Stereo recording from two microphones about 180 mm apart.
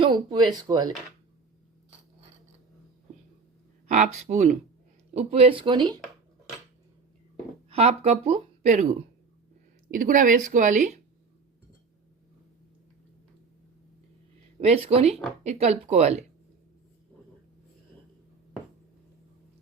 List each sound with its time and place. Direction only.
0.0 s speech: 25° right (ahead or behind)
3.8 s speech: 45° right (ahead or behind); by 6.0 s 25° right (ahead or behind)
7.7 s speech: 35° right (ahead or behind)
14.6 s speech: 35° right (ahead or behind)